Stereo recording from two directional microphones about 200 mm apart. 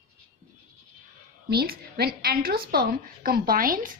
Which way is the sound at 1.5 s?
50° right (ahead or behind).